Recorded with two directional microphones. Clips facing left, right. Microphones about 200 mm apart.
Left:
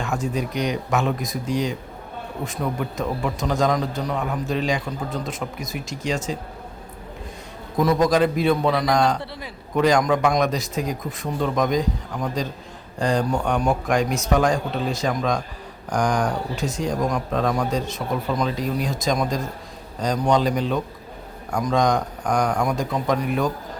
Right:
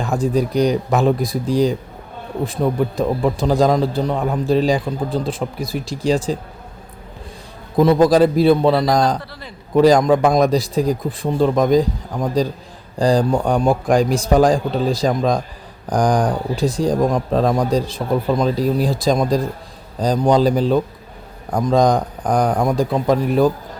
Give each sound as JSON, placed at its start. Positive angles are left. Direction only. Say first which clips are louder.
{"t": 0.0, "sound": "speech", "louder": "right 7 dB", "side_deg": -35}
{"t": 7.8, "sound": "speech", "louder": "right 6 dB", "side_deg": -30}